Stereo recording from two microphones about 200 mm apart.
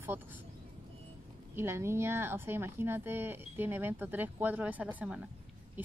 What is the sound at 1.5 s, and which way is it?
A woman's voice, 10° right (ahead or behind).